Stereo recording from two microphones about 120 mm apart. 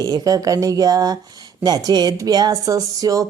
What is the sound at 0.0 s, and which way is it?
Speech, 30° right (ahead or behind).